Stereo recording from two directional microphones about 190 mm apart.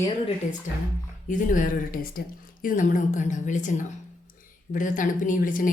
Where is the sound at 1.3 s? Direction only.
45° left (ahead or behind).